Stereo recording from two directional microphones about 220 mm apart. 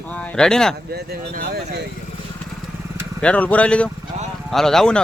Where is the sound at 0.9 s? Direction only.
45° right (ahead or behind).